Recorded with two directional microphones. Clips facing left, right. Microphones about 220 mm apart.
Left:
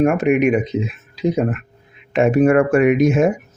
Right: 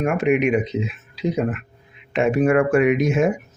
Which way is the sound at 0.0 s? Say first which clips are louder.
Left 4 dB; 45° left (ahead or behind).